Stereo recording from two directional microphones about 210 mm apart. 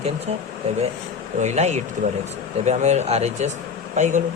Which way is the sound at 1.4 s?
30° right (ahead or behind).